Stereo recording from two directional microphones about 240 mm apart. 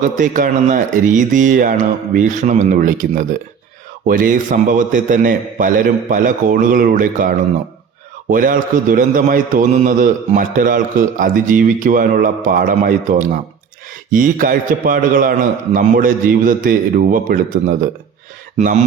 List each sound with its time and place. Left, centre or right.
0.0 s a man's voice: right